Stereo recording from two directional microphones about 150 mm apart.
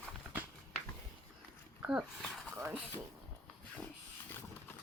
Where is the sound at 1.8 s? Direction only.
Centre (ahead or behind).